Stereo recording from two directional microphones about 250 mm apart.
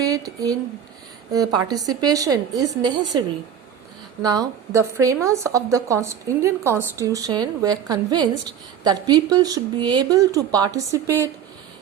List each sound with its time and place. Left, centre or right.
0.0 s speech: centre
4.2 s speech: centre